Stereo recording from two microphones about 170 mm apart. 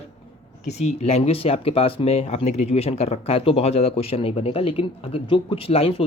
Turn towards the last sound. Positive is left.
turn(degrees=35)  # may be behind; listen again after turning